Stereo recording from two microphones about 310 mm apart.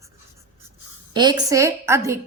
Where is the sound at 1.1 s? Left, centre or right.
Centre.